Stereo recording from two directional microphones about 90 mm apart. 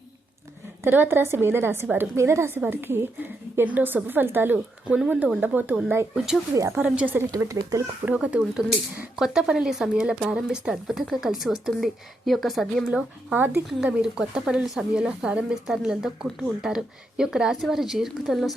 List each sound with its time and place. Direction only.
0.9 s a woman's voice: 25° right (ahead or behind)
6.1 s speech: 5° right (ahead or behind)
6.6 s a woman's voice: 25° right (ahead or behind)
7.3 s speech: 35° right (ahead or behind)
8.0 s speech: 15° right (ahead or behind); by 12.9 s centre (ahead or behind)
12.9 s a woman's voice: 15° right (ahead or behind)
13.7 s speech: 5° right (ahead or behind)